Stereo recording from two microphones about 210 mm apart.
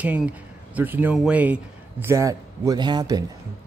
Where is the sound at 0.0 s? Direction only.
5° right (ahead or behind).